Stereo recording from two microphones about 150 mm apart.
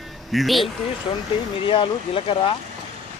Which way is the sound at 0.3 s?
Centre (ahead or behind).